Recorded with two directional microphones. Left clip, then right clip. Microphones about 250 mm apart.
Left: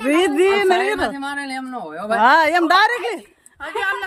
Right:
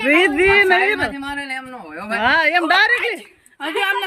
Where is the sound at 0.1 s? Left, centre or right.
Centre.